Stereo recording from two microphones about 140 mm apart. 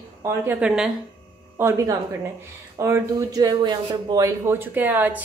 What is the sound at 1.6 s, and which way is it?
Speech, 20° right (ahead or behind).